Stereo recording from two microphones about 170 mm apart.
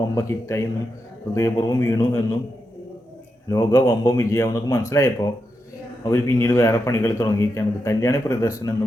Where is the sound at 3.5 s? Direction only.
20° left (ahead or behind).